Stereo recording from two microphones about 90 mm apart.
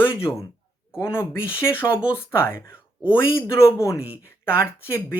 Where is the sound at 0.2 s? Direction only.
30° left (ahead or behind).